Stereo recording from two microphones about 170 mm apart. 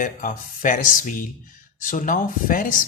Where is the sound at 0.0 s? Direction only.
50° left (ahead or behind).